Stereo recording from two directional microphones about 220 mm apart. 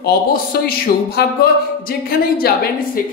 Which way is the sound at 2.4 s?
45° left (ahead or behind).